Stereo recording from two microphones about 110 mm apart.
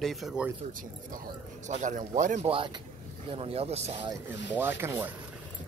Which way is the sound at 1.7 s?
90° right.